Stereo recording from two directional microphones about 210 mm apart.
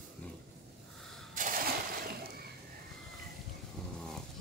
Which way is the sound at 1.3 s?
40° right (ahead or behind).